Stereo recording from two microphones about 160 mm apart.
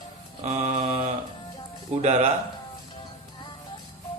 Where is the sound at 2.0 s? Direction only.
45° right (ahead or behind).